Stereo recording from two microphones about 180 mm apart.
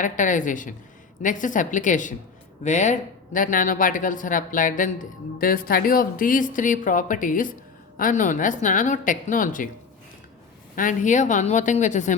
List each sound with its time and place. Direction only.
0.0 s speech: 45° left (ahead or behind)
10.8 s speech: 45° left (ahead or behind)